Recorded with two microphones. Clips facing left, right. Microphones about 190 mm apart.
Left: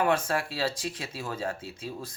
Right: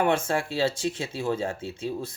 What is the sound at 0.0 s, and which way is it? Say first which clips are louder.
Speech: right 2 dB; 25° right (ahead or behind).